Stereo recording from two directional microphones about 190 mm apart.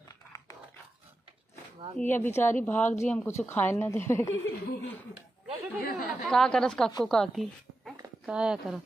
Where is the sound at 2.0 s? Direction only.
10° left (ahead or behind).